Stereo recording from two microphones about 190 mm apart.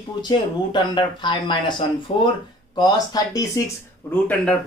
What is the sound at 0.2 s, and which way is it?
Speech, 20° left (ahead or behind).